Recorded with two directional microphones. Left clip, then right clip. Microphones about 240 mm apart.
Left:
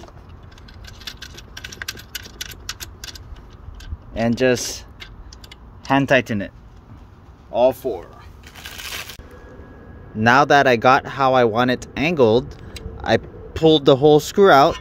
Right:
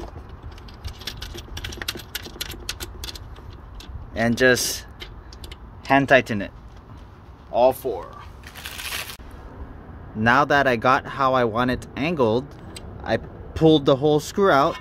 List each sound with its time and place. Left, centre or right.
1.7 s coin: centre
4.2 s speech: left
5.9 s speech: left
7.5 s speech: left
8.5 s a sound: centre
10.1 s speech: centre